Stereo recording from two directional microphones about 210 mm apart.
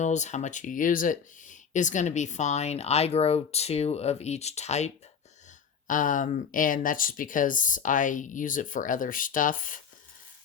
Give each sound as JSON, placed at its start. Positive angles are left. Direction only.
{"t": 0.0, "sound": "speech", "side_deg": 35}
{"t": 5.9, "sound": "speech", "side_deg": 40}